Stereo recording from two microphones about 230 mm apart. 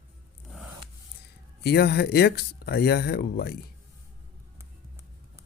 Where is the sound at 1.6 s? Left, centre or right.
Left.